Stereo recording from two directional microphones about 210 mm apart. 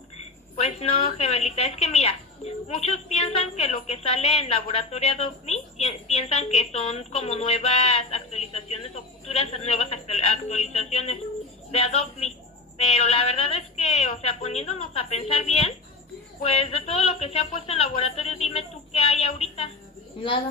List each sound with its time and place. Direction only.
0.2 s a woman's voice: 30° left (ahead or behind)